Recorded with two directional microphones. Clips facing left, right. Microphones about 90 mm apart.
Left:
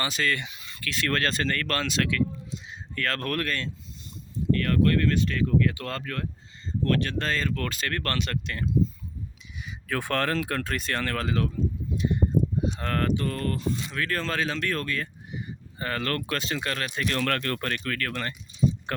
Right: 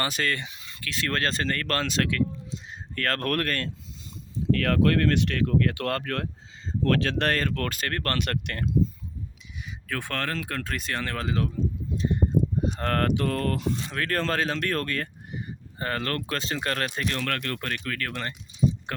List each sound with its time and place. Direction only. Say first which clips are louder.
0.0 s speech: even; 45° right (ahead or behind)
0.3 s speech: left 1 dB; 25° right (ahead or behind); by 3.7 s 55° right (ahead or behind)
4.5 s speech: right 1 dB; 90° right; by 6.2 s 65° right (ahead or behind)
6.8 s speech: right 2 dB; 90° right; by 8.2 s 40° right (ahead or behind)
8.2 s speech: right 1 dB; 55° right (ahead or behind)
9.6 s speech: left 3 dB; 5° left (ahead or behind)
11.0 s speech: left 1 dB; 20° right (ahead or behind)
11.9 s a sound: even; 35° right (ahead or behind)
12.6 s speech: right 2 dB; 50° right (ahead or behind); by 13.7 s 80° right
13.9 s speech: right 5 dB; 55° right (ahead or behind); by 17.1 s 35° right (ahead or behind)
17.2 s speech: left 3 dB; 5° right (ahead or behind); by 18.3 s 20° right (ahead or behind)
18.9 s a sound: left 2 dB; 5° right (ahead or behind)